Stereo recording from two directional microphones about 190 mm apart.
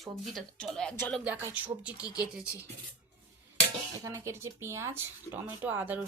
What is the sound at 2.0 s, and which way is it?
Speech, 20° left (ahead or behind).